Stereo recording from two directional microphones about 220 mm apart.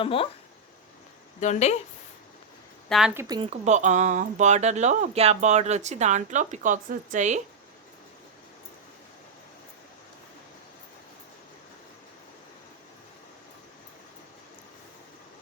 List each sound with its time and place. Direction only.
0.0 s speech: 25° left (ahead or behind)
1.4 s speech: 30° left (ahead or behind)
2.9 s a woman's voice: 5° right (ahead or behind)
3.2 s speech: 20° right (ahead or behind)